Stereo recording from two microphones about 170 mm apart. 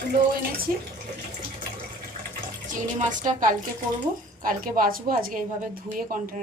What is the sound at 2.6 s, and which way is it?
A woman's voice, 50° right (ahead or behind).